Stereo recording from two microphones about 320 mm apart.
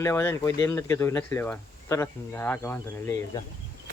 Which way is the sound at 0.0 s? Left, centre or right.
Centre.